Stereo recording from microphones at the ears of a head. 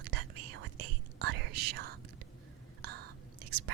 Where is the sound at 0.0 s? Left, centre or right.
Right.